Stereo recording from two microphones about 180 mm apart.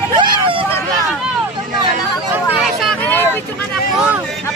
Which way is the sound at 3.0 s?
10° left (ahead or behind).